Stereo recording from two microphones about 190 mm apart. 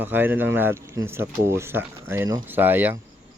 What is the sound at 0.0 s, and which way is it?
Speech, 10° right (ahead or behind).